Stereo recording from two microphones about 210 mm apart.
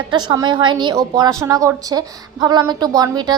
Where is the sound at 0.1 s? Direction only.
20° right (ahead or behind).